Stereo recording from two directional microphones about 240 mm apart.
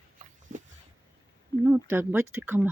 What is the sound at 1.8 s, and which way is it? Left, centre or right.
Speech, centre.